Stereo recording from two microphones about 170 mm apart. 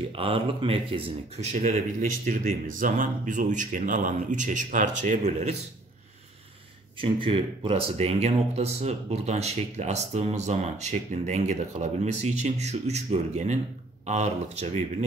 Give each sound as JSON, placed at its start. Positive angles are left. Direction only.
{"t": 0.1, "sound": "speech", "side_deg": -30}
{"t": 7.2, "sound": "speech", "side_deg": -30}